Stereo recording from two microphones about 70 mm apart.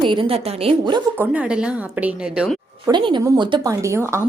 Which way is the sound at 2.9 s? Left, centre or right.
Right.